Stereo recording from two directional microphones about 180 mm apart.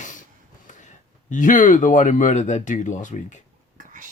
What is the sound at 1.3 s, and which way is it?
Speech, 45° left (ahead or behind).